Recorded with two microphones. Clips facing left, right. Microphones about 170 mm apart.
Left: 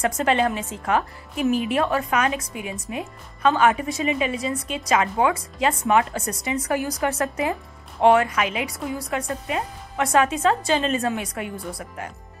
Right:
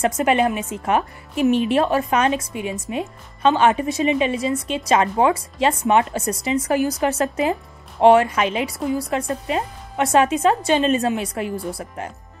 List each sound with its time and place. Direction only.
0.0 s speech: 15° right (ahead or behind)